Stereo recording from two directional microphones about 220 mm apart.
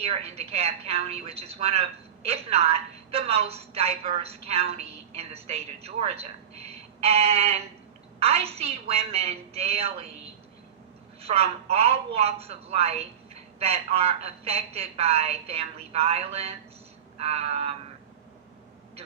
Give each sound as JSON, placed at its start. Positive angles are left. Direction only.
{"t": 0.0, "sound": "a woman's voice", "side_deg": -25}
{"t": 11.2, "sound": "a woman's voice", "side_deg": -25}